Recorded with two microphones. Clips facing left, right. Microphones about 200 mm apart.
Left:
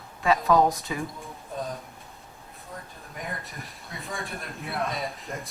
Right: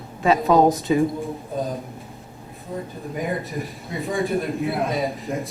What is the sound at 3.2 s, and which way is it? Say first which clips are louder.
A man's voice: right 11 dB; centre (ahead or behind).